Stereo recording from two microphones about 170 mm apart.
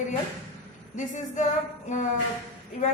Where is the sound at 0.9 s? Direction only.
45° left (ahead or behind).